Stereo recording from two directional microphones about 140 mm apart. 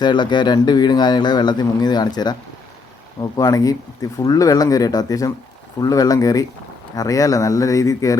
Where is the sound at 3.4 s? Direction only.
25° left (ahead or behind).